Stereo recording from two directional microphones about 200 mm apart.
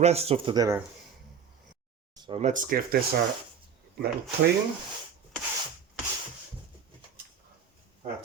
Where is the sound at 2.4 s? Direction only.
40° right (ahead or behind).